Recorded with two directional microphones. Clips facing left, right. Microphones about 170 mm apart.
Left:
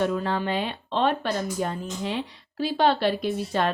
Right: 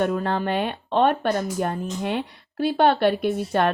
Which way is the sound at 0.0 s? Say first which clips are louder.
Right 2 dB; 55° right (ahead or behind).